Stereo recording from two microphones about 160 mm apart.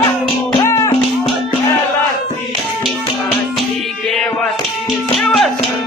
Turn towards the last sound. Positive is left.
turn(degrees=5)  # may be behind; listen again after turning